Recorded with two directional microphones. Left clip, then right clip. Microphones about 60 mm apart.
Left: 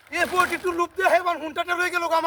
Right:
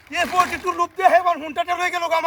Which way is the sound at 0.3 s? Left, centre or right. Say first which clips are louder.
Right 4 dB; centre.